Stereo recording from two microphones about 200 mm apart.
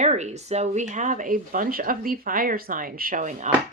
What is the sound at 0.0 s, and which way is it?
Speech, 35° right (ahead or behind).